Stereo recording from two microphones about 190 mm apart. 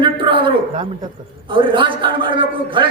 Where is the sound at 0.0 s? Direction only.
25° right (ahead or behind).